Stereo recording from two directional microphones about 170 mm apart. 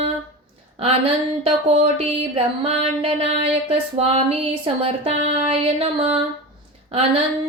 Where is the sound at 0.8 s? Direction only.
35° right (ahead or behind).